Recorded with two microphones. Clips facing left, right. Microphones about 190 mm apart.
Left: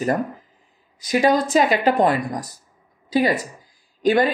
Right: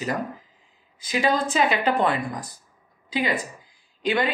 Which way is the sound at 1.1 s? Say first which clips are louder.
Left 5 dB; 40° left (ahead or behind).